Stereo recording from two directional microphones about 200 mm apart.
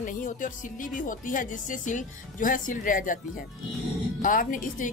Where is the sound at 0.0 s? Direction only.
40° left (ahead or behind).